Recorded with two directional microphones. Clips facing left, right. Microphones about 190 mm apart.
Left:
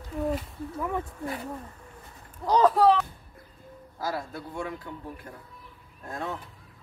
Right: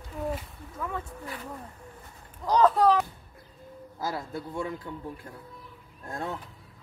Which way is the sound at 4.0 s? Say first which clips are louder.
Even; 25° right (ahead or behind).